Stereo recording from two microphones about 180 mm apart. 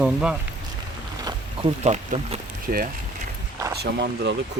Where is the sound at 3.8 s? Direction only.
70° right (ahead or behind).